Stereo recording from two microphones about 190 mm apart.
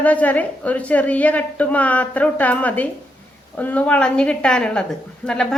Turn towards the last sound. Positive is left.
turn(degrees=5)  # may be behind; listen again after turning